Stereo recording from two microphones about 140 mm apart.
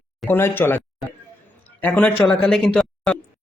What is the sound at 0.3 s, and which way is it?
Speech, 15° left (ahead or behind).